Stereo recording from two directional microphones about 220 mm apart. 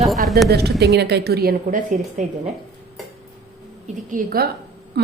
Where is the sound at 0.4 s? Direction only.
50° right (ahead or behind).